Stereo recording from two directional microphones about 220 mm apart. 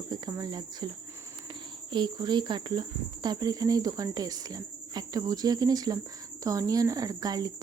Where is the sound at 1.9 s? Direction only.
20° right (ahead or behind).